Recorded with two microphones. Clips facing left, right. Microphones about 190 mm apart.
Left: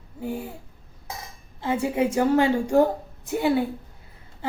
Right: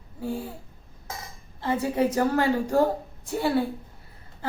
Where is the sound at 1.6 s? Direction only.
10° left (ahead or behind).